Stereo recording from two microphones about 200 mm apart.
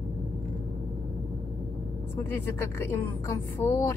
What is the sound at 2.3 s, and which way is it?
A woman's voice, 10° left (ahead or behind).